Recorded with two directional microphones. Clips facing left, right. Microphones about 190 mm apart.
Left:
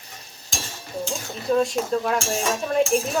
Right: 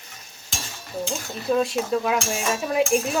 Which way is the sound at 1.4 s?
5° right (ahead or behind).